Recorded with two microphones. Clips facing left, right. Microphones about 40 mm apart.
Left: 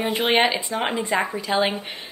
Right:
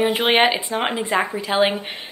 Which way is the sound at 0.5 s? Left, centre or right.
Right.